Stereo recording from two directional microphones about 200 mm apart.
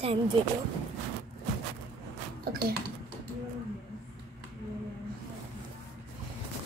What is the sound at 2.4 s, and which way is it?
Speech, 50° right (ahead or behind).